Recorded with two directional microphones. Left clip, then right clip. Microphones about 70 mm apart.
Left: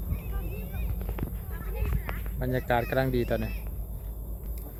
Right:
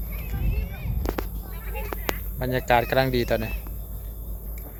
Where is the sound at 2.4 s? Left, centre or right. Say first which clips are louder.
Right 6 dB; right.